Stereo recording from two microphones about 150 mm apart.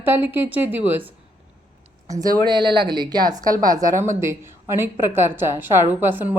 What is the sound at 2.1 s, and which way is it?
A woman's voice, 25° right (ahead or behind).